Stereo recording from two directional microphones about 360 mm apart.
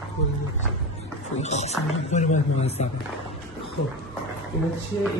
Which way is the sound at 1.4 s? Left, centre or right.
Centre.